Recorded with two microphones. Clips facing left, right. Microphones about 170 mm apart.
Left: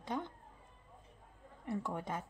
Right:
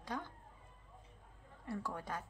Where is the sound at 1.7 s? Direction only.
20° left (ahead or behind).